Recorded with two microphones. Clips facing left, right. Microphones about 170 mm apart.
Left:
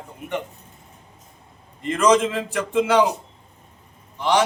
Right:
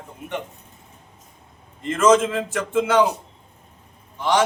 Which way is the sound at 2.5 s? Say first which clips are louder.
Left 1 dB; 15° left (ahead or behind).